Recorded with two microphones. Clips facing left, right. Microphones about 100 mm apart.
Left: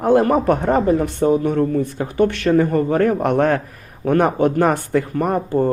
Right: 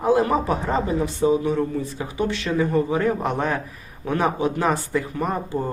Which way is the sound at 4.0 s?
55° left (ahead or behind).